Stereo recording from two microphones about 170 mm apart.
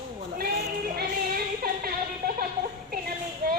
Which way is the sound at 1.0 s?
60° right (ahead or behind).